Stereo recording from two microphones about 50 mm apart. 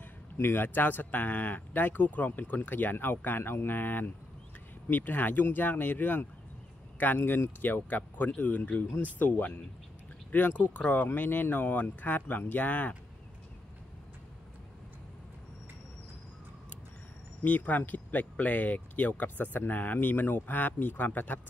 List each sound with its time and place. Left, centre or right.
0.0 s speech: left
17.5 s speech: left